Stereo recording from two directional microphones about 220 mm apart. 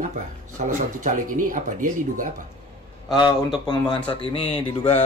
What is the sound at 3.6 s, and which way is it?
Speech, 20° left (ahead or behind).